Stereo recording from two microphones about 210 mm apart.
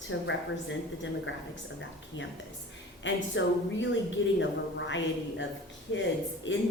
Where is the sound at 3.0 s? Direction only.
60° left (ahead or behind).